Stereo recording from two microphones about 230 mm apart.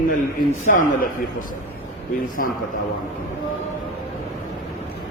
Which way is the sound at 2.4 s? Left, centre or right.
Left.